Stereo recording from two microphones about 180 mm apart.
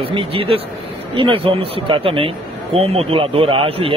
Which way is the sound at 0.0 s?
30° right (ahead or behind).